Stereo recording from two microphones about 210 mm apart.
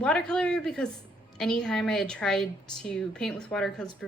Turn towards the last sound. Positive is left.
turn(degrees=5)  # may be behind; listen again after turning